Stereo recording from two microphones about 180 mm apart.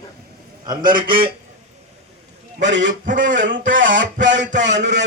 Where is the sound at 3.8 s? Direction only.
90° right.